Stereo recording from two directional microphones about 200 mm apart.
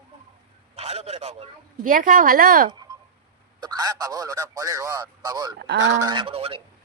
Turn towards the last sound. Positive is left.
turn(degrees=-30)  # may be behind; listen again after turning